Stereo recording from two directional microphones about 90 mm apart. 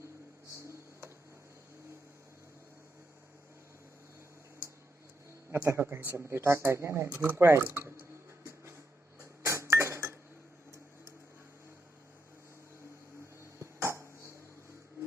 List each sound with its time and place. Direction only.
0.5 s tick: 35° right (ahead or behind)
5.5 s speech: 30° right (ahead or behind)
9.5 s dishes: 30° right (ahead or behind)
13.6 s a sound: 30° right (ahead or behind)